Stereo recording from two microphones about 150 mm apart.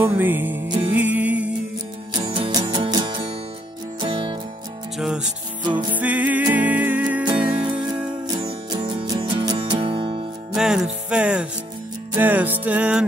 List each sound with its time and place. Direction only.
0.0 s music: 15° right (ahead or behind)
2.1 s music: 35° right (ahead or behind)
4.9 s music: 5° right (ahead or behind)
8.3 s music: 25° right (ahead or behind)
10.5 s music: 5° right (ahead or behind)